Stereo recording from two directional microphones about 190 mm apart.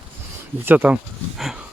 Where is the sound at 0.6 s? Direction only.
10° right (ahead or behind).